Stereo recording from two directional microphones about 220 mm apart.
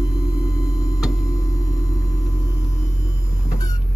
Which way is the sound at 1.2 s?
15° left (ahead or behind).